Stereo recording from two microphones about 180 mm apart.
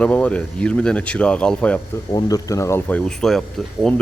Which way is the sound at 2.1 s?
20° left (ahead or behind).